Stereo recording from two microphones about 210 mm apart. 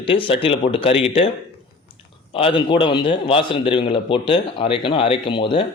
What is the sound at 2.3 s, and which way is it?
A man's voice, 25° left (ahead or behind).